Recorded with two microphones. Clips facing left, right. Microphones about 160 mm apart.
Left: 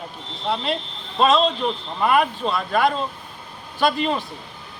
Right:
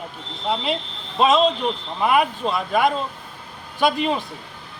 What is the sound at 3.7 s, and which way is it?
Speech, 15° right (ahead or behind).